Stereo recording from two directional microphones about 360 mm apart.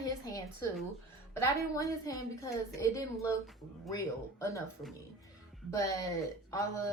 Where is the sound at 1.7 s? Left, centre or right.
Centre.